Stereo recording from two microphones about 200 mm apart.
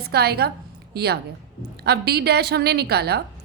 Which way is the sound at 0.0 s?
55° right (ahead or behind).